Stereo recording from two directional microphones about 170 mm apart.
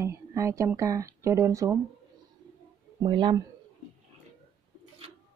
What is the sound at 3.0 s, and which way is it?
Speech, 30° right (ahead or behind).